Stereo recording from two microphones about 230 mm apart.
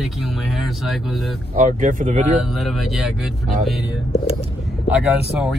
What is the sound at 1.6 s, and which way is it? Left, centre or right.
Speech, right.